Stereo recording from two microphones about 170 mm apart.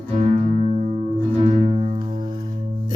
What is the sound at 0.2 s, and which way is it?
Music, 40° right (ahead or behind).